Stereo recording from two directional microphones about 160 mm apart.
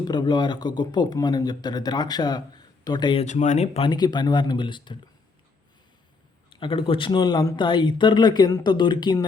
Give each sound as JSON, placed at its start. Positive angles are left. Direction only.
{"t": 0.0, "sound": "speech", "side_deg": 25}
{"t": 3.2, "sound": "speech", "side_deg": 50}
{"t": 3.8, "sound": "speech", "side_deg": 25}
{"t": 6.5, "sound": "speech", "side_deg": 30}